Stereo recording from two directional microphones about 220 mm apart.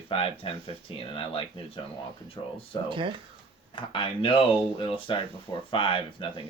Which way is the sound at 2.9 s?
25° right (ahead or behind).